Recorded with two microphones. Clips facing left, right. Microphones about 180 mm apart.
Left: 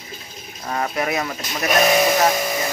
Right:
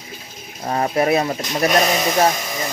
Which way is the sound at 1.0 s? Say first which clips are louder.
Right 8 dB; 30° right (ahead or behind).